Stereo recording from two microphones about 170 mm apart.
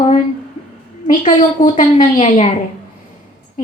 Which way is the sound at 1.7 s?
45° left (ahead or behind).